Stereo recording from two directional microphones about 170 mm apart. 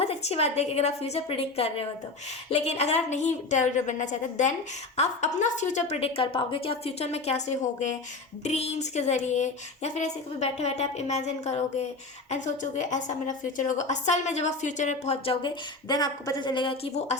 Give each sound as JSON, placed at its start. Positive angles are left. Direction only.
{"t": 0.0, "sound": "a woman's voice", "side_deg": 40}